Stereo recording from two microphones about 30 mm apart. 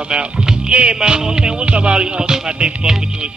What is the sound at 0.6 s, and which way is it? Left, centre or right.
Music, right.